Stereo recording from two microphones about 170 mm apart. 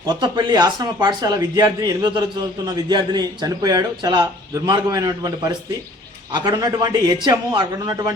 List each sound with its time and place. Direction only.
0.0 s speech: 25° right (ahead or behind)